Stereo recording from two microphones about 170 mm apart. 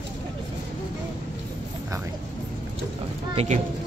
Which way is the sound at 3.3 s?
35° right (ahead or behind).